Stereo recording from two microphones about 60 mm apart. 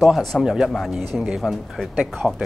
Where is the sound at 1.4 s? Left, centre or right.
Centre.